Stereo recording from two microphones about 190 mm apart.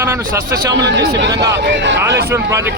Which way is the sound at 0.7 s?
65° right (ahead or behind).